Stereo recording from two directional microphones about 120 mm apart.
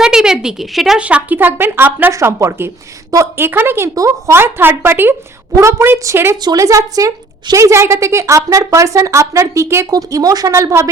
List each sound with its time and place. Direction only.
0.0 s a woman's voice: 5° right (ahead or behind); by 10.8 s 25° right (ahead or behind)